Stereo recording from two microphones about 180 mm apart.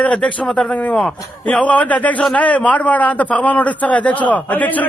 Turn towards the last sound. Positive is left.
turn(degrees=10)  # may be behind; listen again after turning